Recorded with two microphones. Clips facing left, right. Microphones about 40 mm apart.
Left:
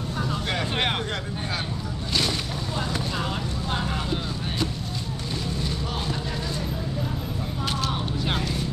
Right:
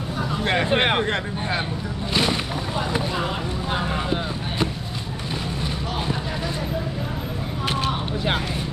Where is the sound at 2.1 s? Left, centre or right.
Right.